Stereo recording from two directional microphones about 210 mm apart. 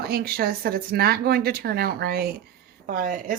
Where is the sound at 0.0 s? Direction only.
45° right (ahead or behind).